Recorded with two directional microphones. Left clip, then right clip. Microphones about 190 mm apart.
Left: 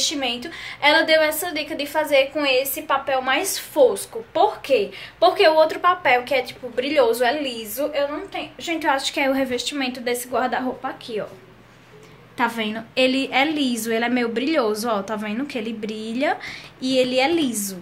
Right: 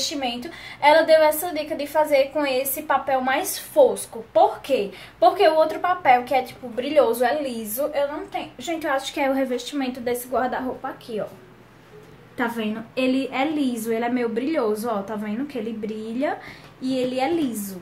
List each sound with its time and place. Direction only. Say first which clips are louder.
0.0 s a woman's voice: left 3 dB; 5° right (ahead or behind)
12.4 s a woman's voice: left 3 dB; 10° left (ahead or behind)